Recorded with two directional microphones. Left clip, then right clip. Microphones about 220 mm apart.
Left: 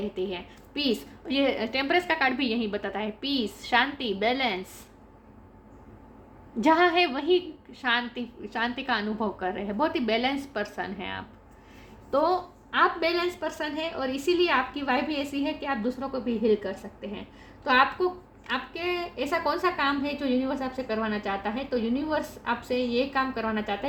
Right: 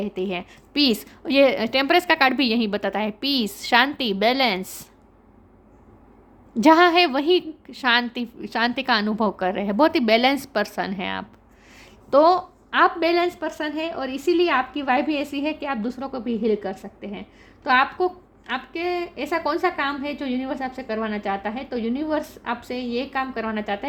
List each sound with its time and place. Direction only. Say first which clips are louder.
0.2 s a woman's voice: right 5 dB; 50° right (ahead or behind)
6.6 s a woman's voice: right 6 dB; 45° right (ahead or behind)